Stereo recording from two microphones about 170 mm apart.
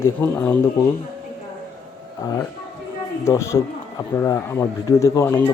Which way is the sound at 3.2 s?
15° left (ahead or behind).